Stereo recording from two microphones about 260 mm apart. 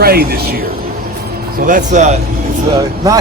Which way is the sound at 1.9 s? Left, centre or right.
Right.